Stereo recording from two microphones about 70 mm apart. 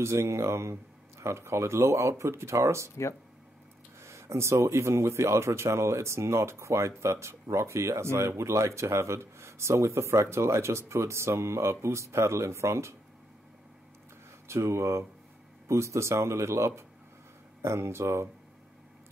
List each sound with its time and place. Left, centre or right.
0.0 s speech: right
4.0 s speech: right
14.5 s speech: right